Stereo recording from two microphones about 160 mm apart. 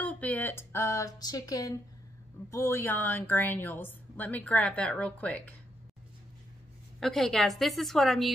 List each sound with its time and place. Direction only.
0.0 s a woman's voice: 10° left (ahead or behind)
7.0 s a woman's voice: 5° left (ahead or behind)